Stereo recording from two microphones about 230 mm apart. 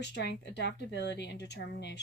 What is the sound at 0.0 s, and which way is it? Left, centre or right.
A woman's voice, left.